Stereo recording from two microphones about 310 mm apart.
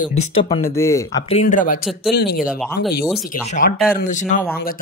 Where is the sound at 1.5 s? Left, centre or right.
Left.